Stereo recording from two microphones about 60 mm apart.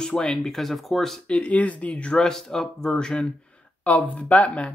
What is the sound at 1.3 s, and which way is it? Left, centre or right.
Speech, left.